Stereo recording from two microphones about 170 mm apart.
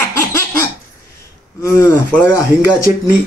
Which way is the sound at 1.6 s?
15° left (ahead or behind).